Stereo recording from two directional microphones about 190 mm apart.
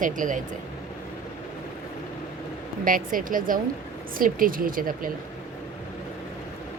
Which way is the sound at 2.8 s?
45° right (ahead or behind).